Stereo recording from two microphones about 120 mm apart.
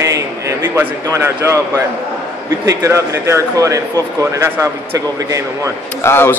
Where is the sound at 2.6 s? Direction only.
25° right (ahead or behind).